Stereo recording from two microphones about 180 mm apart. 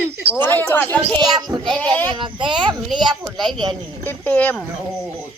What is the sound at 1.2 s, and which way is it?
Speech, 20° right (ahead or behind).